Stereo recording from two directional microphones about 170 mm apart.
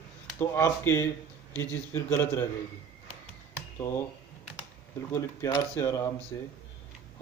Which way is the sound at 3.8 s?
15° left (ahead or behind).